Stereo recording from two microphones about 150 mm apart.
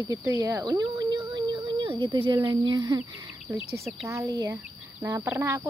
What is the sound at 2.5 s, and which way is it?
Speech, 25° right (ahead or behind).